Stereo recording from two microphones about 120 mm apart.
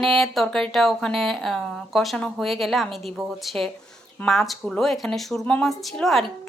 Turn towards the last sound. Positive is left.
turn(degrees=0)  # may be behind; listen again after turning